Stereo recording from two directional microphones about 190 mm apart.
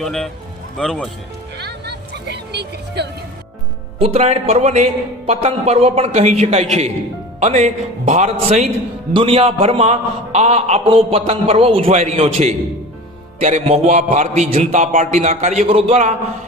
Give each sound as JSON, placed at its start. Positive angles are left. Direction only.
{"t": 0.0, "sound": "speech", "side_deg": 0}
{"t": 1.5, "sound": "music", "side_deg": -60}
{"t": 4.0, "sound": "a man's voice", "side_deg": -35}